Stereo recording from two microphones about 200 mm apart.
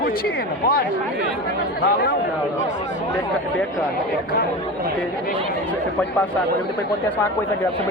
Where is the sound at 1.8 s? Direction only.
50° left (ahead or behind).